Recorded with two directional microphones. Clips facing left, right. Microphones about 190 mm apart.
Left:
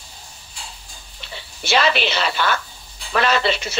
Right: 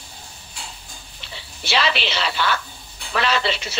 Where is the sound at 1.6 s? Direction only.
50° left (ahead or behind).